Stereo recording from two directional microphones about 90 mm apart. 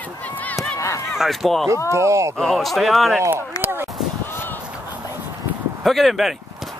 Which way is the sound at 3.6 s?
25° right (ahead or behind).